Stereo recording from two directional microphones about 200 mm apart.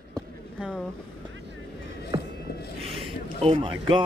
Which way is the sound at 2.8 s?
25° right (ahead or behind).